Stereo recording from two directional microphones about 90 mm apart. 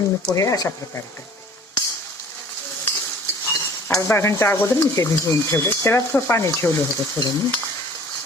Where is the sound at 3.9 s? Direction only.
35° left (ahead or behind).